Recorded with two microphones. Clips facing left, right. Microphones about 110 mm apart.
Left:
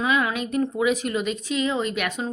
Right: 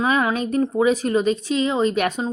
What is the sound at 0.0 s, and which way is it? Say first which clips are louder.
A woman's voice: right 3 dB; 30° right (ahead or behind).